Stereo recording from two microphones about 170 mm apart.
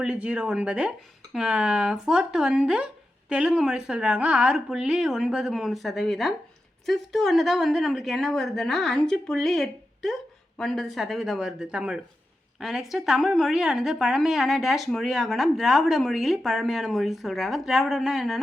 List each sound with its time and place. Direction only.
0.0 s speech: 5° right (ahead or behind)